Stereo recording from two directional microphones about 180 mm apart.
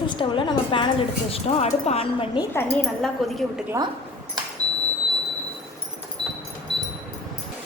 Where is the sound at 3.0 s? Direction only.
Centre (ahead or behind).